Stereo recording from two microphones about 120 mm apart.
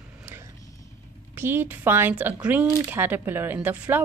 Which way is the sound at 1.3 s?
20° right (ahead or behind).